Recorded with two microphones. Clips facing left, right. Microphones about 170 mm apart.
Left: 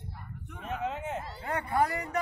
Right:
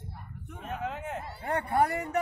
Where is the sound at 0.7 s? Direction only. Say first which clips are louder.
Left 1 dB; centre (ahead or behind).